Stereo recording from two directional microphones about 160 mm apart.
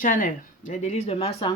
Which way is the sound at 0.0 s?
55° left (ahead or behind).